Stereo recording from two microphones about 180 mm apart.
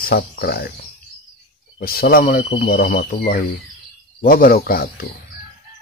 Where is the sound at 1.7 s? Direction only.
55° left (ahead or behind).